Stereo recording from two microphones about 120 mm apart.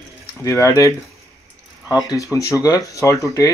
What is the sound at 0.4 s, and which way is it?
Speech, 25° left (ahead or behind).